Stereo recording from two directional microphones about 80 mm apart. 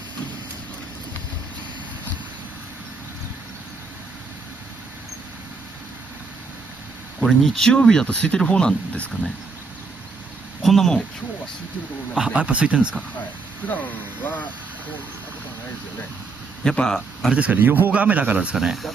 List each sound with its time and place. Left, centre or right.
7.2 s speech: centre
10.6 s speech: centre
12.2 s speech: centre
13.7 s speech: left
16.6 s speech: centre
17.3 s speech: centre